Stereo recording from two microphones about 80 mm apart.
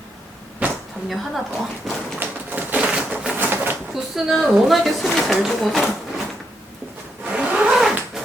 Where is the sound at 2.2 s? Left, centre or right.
Right.